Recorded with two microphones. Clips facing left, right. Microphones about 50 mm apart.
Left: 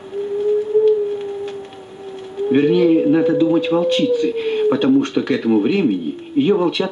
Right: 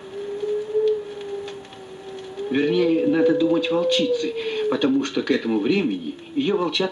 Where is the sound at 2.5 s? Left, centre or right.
Left.